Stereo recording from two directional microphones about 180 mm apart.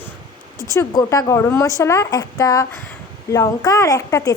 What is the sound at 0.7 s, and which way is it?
A woman's voice, 20° left (ahead or behind).